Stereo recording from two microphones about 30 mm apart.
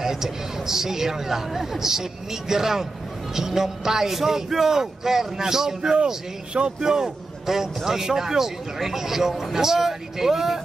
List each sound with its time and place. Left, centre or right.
0.0 s a man's voice: centre